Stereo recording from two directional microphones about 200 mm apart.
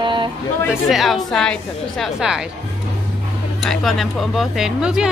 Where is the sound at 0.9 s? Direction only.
Centre (ahead or behind).